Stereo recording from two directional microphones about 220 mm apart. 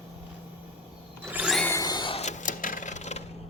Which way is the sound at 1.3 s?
5° right (ahead or behind).